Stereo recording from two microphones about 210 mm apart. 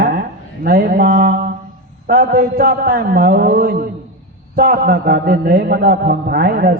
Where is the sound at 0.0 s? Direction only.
45° right (ahead or behind).